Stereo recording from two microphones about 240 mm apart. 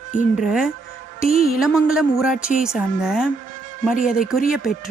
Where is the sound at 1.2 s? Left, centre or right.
Left.